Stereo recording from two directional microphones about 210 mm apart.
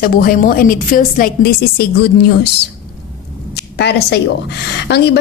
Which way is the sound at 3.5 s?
50° left (ahead or behind).